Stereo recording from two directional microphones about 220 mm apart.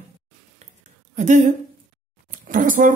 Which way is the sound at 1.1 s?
35° right (ahead or behind).